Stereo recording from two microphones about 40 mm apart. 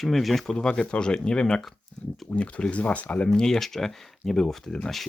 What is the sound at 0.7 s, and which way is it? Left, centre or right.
Speech, left.